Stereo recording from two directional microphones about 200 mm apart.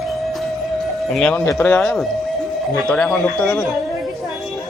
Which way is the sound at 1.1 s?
5° left (ahead or behind).